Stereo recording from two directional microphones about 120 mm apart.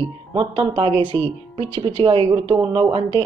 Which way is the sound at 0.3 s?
50° right (ahead or behind).